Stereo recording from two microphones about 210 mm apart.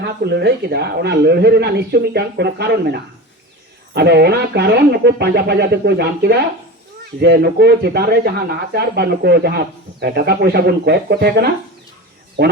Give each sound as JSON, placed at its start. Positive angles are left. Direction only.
{"t": 0.0, "sound": "speech", "side_deg": -50}